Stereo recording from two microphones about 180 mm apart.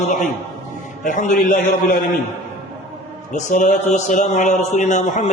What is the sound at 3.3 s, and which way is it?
A man's voice, 50° left (ahead or behind).